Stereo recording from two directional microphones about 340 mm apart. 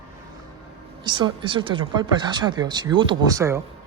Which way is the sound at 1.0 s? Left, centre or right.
Centre.